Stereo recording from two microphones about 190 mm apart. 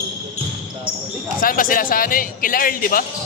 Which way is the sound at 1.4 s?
45° left (ahead or behind).